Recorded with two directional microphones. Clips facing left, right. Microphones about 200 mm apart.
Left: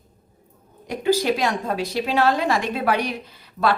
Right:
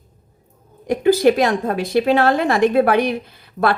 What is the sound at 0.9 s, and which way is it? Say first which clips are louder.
A woman's voice: right 7 dB; 55° right (ahead or behind).